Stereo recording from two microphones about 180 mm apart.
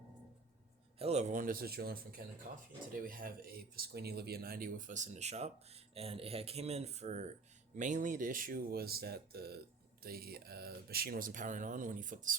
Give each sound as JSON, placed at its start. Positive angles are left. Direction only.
{"t": 0.9, "sound": "speech", "side_deg": -35}